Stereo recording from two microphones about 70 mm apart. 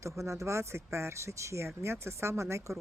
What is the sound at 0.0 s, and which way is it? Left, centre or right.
Speech, right.